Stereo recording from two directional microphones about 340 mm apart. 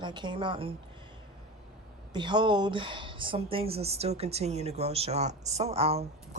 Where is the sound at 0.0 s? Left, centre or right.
Centre.